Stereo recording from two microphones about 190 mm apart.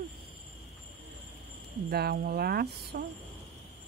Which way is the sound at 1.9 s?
55° right (ahead or behind).